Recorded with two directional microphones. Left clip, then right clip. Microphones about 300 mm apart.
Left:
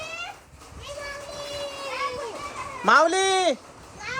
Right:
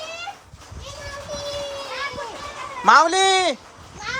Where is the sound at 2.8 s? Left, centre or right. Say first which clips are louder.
Right 4 dB; centre.